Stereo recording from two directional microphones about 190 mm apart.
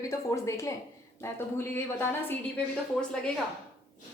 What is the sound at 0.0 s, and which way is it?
A woman's voice, 15° left (ahead or behind).